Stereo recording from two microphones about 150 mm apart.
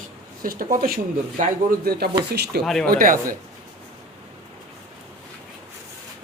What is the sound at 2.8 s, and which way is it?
Speech, 70° right (ahead or behind).